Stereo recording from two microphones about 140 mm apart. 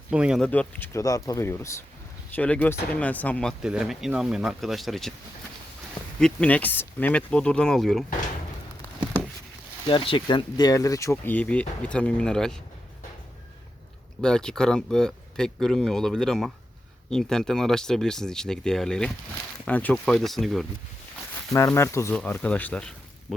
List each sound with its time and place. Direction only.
0.1 s speech: 5° right (ahead or behind)
0.4 s speech: 10° left (ahead or behind)
0.9 s speech: 25° left (ahead or behind)
3.6 s speech: 5° right (ahead or behind)
6.1 s speech: 5° left (ahead or behind)
9.8 s speech: 35° left (ahead or behind); by 12.5 s 5° left (ahead or behind)
14.2 s speech: 5° left (ahead or behind)
21.5 s speech: 20° left (ahead or behind)